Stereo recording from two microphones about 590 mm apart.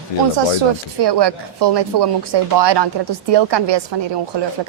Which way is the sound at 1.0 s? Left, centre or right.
Right.